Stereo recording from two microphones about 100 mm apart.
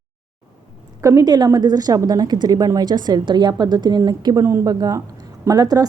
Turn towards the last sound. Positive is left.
turn(degrees=-40)  # may be behind; listen again after turning